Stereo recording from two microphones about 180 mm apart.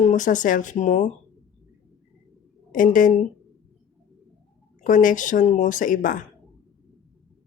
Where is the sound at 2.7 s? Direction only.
45° left (ahead or behind).